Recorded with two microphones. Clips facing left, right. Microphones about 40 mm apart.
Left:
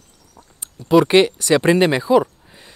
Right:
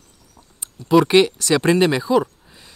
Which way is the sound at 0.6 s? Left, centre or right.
Centre.